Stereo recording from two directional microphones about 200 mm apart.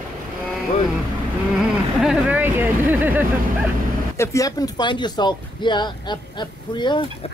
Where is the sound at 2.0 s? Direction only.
5° right (ahead or behind).